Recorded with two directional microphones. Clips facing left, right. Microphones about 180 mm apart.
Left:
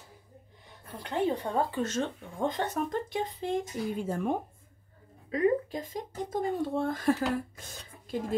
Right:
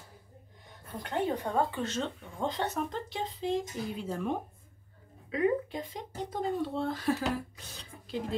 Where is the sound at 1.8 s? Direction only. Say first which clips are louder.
Left 3 dB; 50° left (ahead or behind).